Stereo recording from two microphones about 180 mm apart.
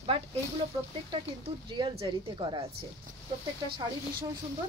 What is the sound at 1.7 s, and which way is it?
Speech, 25° right (ahead or behind).